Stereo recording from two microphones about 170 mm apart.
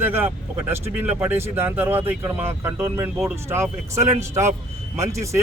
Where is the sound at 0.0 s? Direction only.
10° right (ahead or behind).